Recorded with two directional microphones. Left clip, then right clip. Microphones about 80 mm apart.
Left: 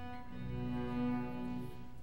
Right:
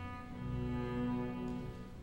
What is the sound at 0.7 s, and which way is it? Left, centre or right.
Music, left.